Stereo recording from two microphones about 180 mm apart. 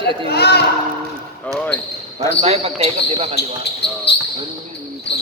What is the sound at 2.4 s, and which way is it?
Speech, 35° right (ahead or behind).